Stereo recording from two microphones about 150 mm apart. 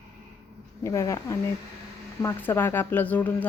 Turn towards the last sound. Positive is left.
turn(degrees=10)  # may be behind; listen again after turning